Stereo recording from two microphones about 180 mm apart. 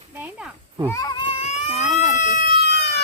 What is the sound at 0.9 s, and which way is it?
Baby cry, 20° left (ahead or behind).